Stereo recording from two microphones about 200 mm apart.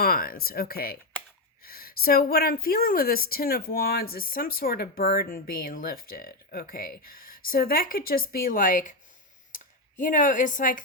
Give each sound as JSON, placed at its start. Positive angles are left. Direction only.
{"t": 0.0, "sound": "a woman's voice", "side_deg": 45}
{"t": 10.0, "sound": "a woman's voice", "side_deg": 40}